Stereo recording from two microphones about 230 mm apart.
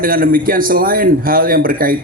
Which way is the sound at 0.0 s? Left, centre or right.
Right.